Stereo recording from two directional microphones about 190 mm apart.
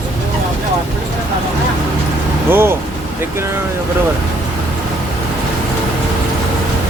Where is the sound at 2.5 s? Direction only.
10° right (ahead or behind).